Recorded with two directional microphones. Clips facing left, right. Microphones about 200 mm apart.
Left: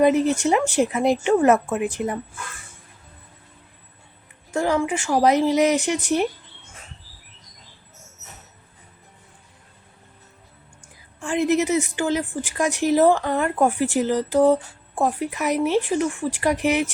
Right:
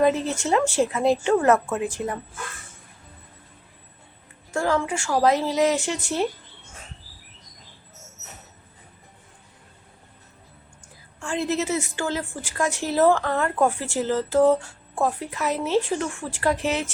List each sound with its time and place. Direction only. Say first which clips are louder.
0.0 s a woman's voice: left 4 dB; 15° left (ahead or behind)
4.5 s speech: left 2 dB; 15° left (ahead or behind)
11.2 s a woman's voice: left 5 dB; 15° left (ahead or behind)